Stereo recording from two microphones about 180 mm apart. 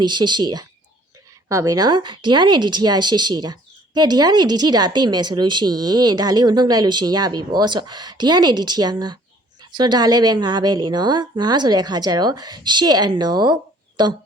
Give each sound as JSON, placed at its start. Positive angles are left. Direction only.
{"t": 0.0, "sound": "speech", "side_deg": -25}